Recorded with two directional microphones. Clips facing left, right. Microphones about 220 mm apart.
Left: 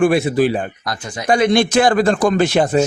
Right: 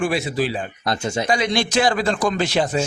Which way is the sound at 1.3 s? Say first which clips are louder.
Left 10 dB; 55° left (ahead or behind).